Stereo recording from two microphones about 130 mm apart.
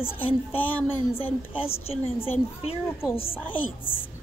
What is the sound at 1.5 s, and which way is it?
Speech, 50° left (ahead or behind).